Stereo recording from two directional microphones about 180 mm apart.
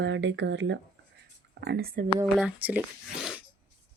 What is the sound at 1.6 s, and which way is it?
Speech, 65° right (ahead or behind).